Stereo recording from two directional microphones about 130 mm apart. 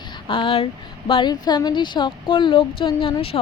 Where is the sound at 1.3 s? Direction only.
30° left (ahead or behind).